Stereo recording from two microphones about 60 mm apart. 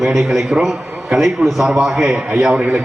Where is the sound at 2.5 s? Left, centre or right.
Right.